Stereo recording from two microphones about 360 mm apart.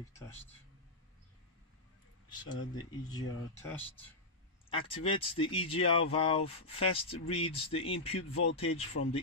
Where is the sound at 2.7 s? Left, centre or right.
Centre.